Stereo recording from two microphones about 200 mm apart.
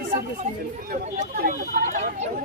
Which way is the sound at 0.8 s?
45° right (ahead or behind).